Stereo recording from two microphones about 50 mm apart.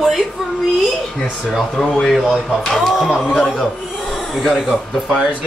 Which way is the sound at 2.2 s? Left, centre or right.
Centre.